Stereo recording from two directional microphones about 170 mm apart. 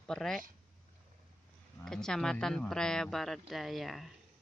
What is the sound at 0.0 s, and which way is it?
Speech, 5° left (ahead or behind).